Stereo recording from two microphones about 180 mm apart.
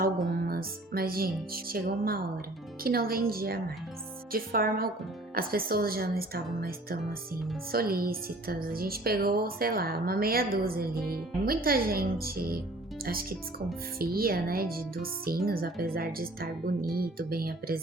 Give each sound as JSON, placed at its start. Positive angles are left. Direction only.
{"t": 0.4, "sound": "speech", "side_deg": -55}
{"t": 14.0, "sound": "speech", "side_deg": -55}